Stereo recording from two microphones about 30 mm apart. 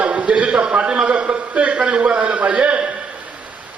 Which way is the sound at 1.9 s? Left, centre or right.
Right.